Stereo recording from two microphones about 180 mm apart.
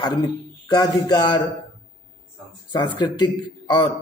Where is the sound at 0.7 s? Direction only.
20° left (ahead or behind).